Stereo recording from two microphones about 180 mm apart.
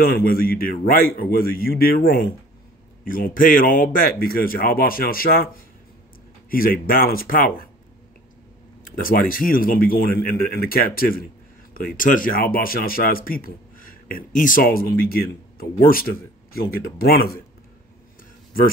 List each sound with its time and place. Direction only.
0.0 s a man's voice: 55° left (ahead or behind)
6.5 s speech: 55° left (ahead or behind)
8.8 s speech: 50° left (ahead or behind)